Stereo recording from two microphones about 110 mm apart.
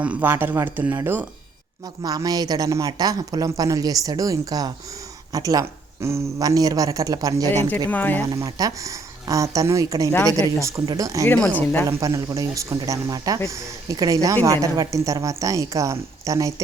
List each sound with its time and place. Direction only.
0.0 s speech: 15° right (ahead or behind)
2.0 s speech: 35° right (ahead or behind)
7.9 s speech: 15° left (ahead or behind)
8.3 s speech: 30° right (ahead or behind)